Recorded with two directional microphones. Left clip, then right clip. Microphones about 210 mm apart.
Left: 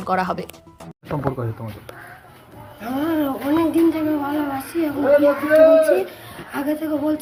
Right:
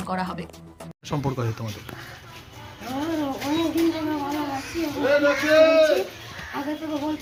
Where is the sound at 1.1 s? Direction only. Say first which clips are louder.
Left 3 dB; 25° right (ahead or behind).